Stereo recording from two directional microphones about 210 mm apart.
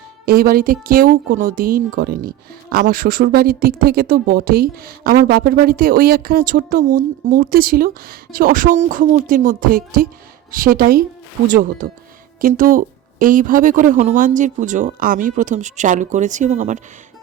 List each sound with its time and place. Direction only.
0.3 s a woman's voice: 45° right (ahead or behind)